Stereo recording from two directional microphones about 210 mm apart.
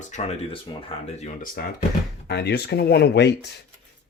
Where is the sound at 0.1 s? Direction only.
25° left (ahead or behind).